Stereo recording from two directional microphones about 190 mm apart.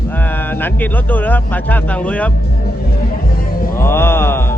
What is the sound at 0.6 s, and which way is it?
Speech, 10° left (ahead or behind).